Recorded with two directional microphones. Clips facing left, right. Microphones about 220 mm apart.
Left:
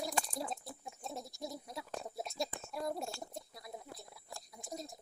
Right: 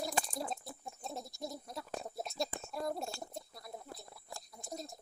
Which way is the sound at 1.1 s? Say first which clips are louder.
Right 1 dB; 10° left (ahead or behind).